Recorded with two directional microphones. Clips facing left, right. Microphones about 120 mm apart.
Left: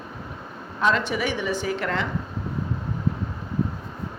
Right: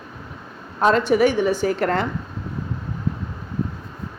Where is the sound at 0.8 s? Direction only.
45° right (ahead or behind).